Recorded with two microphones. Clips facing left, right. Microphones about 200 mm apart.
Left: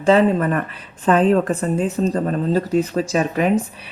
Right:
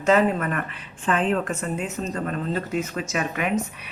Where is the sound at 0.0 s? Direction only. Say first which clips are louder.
Left 5 dB; 30° left (ahead or behind).